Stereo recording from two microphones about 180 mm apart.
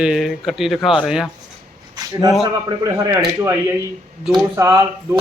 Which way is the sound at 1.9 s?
20° right (ahead or behind).